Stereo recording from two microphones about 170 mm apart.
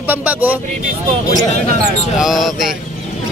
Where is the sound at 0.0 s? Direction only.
10° right (ahead or behind).